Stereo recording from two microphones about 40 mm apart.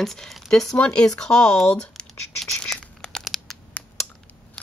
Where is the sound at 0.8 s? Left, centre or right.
Left.